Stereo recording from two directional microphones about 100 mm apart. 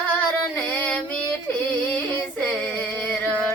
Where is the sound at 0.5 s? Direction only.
15° left (ahead or behind).